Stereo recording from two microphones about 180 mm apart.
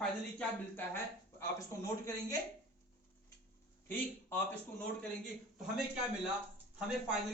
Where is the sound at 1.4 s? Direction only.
15° left (ahead or behind).